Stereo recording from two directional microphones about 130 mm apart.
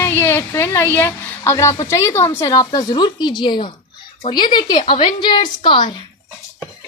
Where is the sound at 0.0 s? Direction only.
20° left (ahead or behind).